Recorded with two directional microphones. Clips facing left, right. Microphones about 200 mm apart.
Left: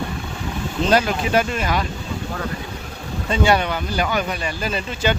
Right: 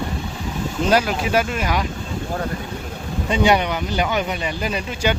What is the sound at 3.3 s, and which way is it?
Speech, 15° right (ahead or behind).